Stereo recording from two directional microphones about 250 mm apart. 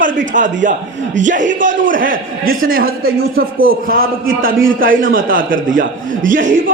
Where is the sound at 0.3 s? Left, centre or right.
Right.